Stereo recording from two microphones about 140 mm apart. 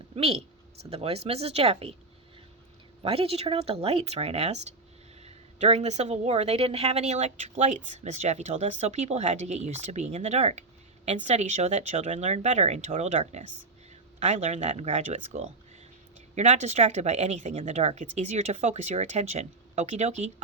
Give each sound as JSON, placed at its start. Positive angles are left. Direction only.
{"t": 0.2, "sound": "speech", "side_deg": -45}
{"t": 3.0, "sound": "speech", "side_deg": -45}